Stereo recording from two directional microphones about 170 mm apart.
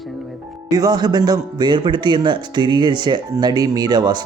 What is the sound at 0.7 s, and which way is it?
Speech, 20° right (ahead or behind).